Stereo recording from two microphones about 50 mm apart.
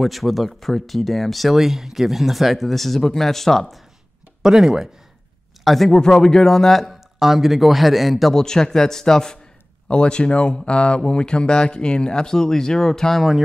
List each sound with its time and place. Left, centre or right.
0.0 s speech: centre
4.4 s speech: centre
5.6 s speech: centre
5.9 s speech: centre